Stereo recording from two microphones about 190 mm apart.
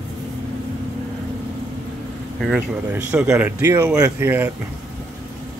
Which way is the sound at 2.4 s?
5° right (ahead or behind).